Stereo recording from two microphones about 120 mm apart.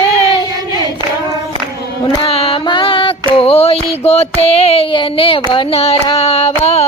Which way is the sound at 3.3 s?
55° left (ahead or behind).